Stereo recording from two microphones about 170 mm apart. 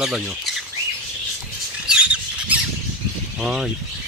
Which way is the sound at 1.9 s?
5° right (ahead or behind).